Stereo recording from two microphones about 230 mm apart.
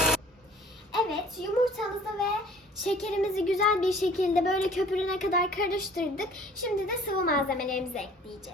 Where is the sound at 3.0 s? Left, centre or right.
Centre.